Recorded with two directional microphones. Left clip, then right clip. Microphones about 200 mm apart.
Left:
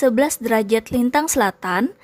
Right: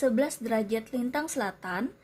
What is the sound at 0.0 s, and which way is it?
A woman's voice, 35° left (ahead or behind).